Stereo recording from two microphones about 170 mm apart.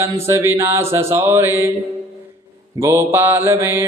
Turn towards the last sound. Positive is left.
turn(degrees=-15)  # may be behind; listen again after turning